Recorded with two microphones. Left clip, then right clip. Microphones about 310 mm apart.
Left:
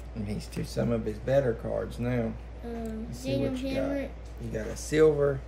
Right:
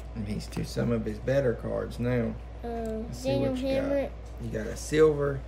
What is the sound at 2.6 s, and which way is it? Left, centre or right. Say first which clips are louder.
A woman's voice: right 4 dB; centre.